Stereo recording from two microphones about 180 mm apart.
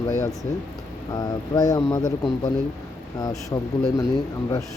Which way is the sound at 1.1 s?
20° left (ahead or behind).